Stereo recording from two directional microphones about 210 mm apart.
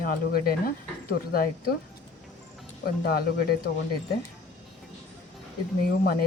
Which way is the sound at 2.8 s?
45° left (ahead or behind).